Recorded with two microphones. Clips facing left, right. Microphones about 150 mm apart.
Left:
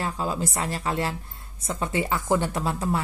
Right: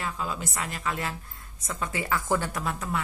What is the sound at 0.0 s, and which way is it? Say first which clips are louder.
A woman's voice: left 5 dB; 35° left (ahead or behind).